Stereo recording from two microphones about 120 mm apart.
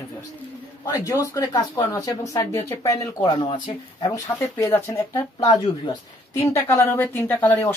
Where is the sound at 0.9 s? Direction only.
30° left (ahead or behind).